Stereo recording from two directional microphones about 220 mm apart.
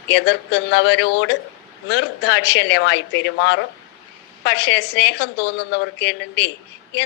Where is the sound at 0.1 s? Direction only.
50° left (ahead or behind).